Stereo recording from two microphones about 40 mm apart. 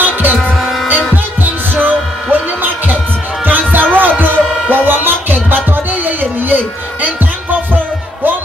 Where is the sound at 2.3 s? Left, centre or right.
Right.